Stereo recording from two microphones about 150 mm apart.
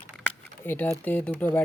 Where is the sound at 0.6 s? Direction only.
15° left (ahead or behind).